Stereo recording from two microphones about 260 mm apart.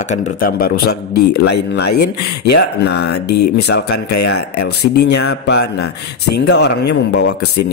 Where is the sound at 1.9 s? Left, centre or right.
Left.